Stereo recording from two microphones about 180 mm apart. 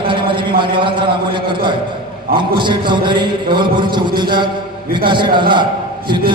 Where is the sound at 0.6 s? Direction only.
25° right (ahead or behind).